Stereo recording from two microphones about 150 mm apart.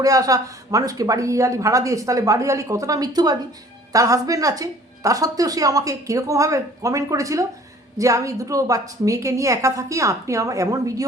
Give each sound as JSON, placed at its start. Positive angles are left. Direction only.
{"t": 0.0, "sound": "a woman's voice", "side_deg": -25}